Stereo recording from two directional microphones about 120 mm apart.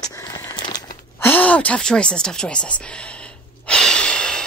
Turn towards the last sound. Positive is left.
turn(degrees=5)  # may be behind; listen again after turning